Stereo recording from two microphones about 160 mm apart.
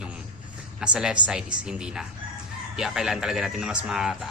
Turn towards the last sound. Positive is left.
turn(degrees=-5)  # may be behind; listen again after turning